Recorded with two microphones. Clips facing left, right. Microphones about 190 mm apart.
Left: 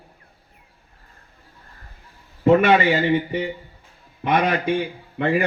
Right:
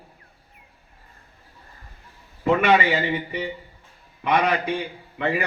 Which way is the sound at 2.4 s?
45° left (ahead or behind).